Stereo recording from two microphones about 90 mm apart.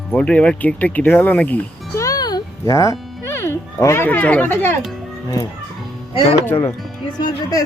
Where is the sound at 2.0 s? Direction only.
45° left (ahead or behind).